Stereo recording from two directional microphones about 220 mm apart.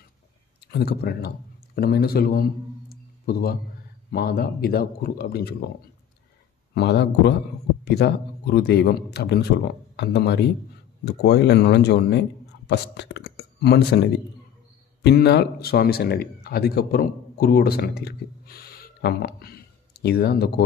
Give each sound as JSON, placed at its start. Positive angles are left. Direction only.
{"t": 0.7, "sound": "speech", "side_deg": 45}
{"t": 2.9, "sound": "a sound", "side_deg": 45}
{"t": 4.1, "sound": "speech", "side_deg": 45}
{"t": 6.7, "sound": "a man's voice", "side_deg": 50}